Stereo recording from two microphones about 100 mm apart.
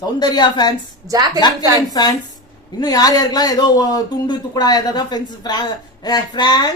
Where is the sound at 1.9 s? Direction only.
40° left (ahead or behind).